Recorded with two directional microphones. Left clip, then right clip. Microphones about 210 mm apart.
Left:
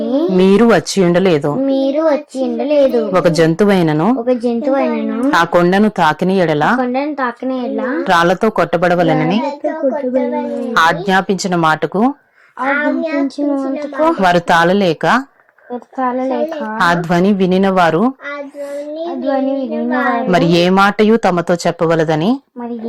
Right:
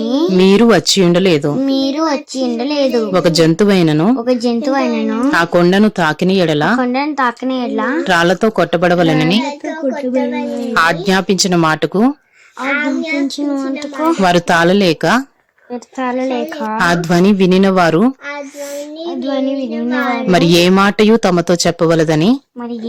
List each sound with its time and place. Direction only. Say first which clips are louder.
0.2 s a child's voice: right 1 dB; 25° right (ahead or behind)
1.6 s child singing: left 2 dB; 35° right (ahead or behind)
3.1 s a child's voice: even; 20° right (ahead or behind)
5.3 s a child's voice: left 1 dB; 20° right (ahead or behind)
8.0 s a child's voice: left 1 dB; 20° right (ahead or behind)
9.1 s child singing: right 1 dB; 30° right (ahead or behind)
10.8 s a child's voice: left 1 dB; 25° right (ahead or behind)
12.6 s child singing: left 1 dB; 35° right (ahead or behind)
13.2 s a child's voice: left 1 dB; 50° right (ahead or behind)
14.2 s a child's voice: right 1 dB; 25° right (ahead or behind)
16.3 s a child's voice: even; 25° right (ahead or behind)
19.7 s a child's voice: left 3 dB; 30° right (ahead or behind)